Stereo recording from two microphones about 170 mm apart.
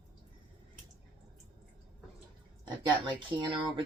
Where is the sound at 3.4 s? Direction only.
30° right (ahead or behind).